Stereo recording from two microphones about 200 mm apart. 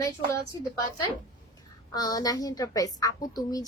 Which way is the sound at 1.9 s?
20° left (ahead or behind).